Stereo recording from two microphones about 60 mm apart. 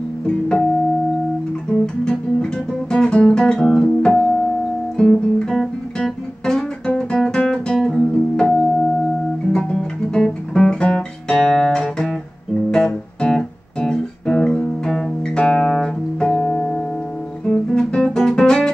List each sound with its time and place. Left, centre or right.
0.3 s music: centre
1.7 s music: centre
4.9 s guitar: centre
7.3 s music: centre
16.3 s music: left
17.5 s guitar: centre